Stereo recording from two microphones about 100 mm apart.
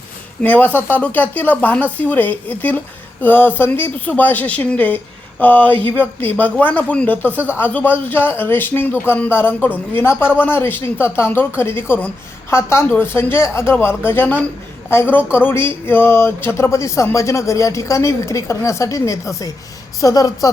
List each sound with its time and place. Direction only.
0.4 s speech: 15° left (ahead or behind)
7.3 s speech: 15° right (ahead or behind)
7.6 s a woman's voice: 15° left (ahead or behind); by 20.5 s 35° left (ahead or behind)